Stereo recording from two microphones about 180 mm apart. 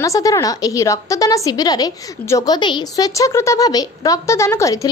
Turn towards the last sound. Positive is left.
turn(degrees=20)  # may be behind; listen again after turning